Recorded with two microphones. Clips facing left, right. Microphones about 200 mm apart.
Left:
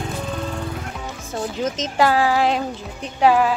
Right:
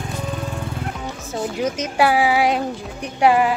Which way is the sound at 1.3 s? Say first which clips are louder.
Right 1 dB; 10° right (ahead or behind).